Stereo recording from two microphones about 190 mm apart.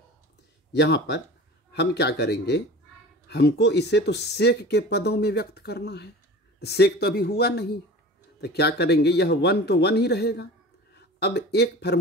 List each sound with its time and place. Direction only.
0.7 s speech: 60° left (ahead or behind)